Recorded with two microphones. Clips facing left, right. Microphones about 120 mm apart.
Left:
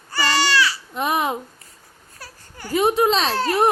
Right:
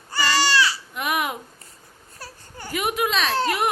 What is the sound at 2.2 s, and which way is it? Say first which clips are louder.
Baby cry: even; 25° right (ahead or behind).